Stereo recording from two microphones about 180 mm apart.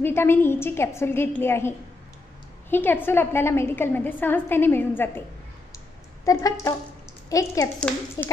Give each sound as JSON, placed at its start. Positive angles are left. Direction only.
{"t": 0.0, "sound": "a woman's voice", "side_deg": 10}
{"t": 6.2, "sound": "a woman's voice", "side_deg": 20}